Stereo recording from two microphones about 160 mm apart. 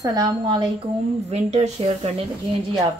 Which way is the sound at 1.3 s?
40° right (ahead or behind).